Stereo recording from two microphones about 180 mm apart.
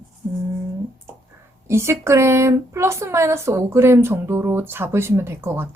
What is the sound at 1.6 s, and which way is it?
Speech, 15° right (ahead or behind).